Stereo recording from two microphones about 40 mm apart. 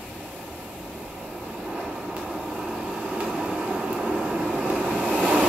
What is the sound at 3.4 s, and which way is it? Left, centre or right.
Vehicle, right.